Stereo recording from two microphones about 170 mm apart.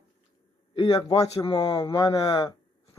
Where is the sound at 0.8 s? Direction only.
30° left (ahead or behind).